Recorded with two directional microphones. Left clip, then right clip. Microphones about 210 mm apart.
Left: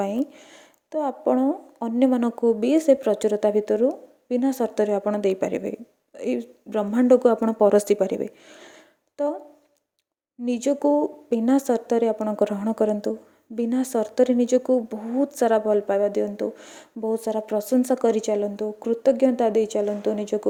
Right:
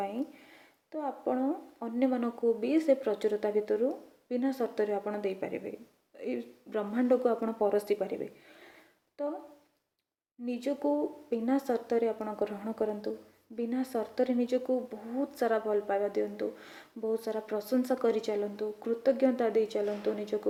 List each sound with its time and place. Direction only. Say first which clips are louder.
0.0 s speech: left 9 dB; 50° left (ahead or behind)
10.4 s speech: left 10 dB; 45° left (ahead or behind)